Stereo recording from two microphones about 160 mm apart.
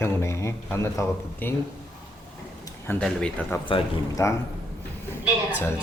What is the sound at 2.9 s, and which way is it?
Speech, 5° left (ahead or behind).